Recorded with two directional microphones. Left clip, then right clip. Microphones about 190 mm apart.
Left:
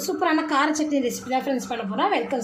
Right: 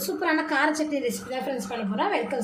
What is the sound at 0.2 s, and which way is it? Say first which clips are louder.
A woman's voice: left 2 dB; 15° left (ahead or behind).